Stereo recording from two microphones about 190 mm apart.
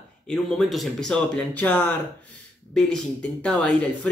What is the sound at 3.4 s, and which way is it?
Speech, 5° left (ahead or behind).